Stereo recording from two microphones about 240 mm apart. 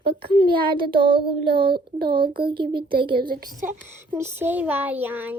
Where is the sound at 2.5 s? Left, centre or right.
Centre.